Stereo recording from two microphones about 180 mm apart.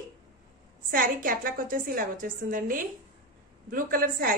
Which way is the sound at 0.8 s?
55° right (ahead or behind).